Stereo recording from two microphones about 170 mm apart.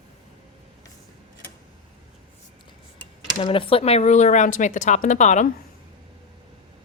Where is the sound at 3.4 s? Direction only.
30° left (ahead or behind).